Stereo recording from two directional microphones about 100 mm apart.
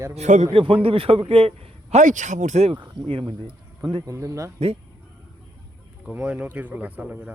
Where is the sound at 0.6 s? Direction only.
60° right (ahead or behind); by 2.0 s 80° right.